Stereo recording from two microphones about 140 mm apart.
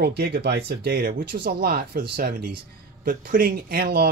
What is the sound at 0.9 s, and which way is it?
Speech, 90° right.